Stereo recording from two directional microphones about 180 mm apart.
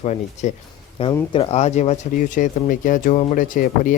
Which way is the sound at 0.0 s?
40° left (ahead or behind).